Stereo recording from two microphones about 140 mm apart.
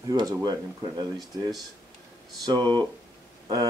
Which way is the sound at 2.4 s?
30° right (ahead or behind).